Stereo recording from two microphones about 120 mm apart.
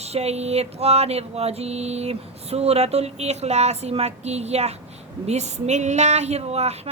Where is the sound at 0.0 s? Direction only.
60° right (ahead or behind).